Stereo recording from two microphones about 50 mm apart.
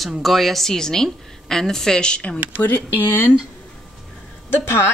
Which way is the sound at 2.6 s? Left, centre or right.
Left.